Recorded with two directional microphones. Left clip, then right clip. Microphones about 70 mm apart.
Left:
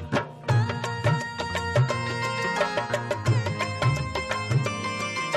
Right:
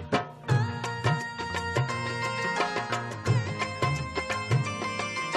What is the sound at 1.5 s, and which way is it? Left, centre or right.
Music, left.